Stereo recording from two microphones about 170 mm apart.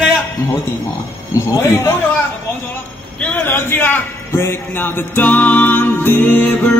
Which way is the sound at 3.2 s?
10° left (ahead or behind).